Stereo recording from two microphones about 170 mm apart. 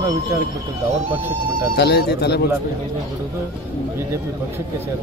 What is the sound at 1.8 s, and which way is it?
Speech, 75° left (ahead or behind).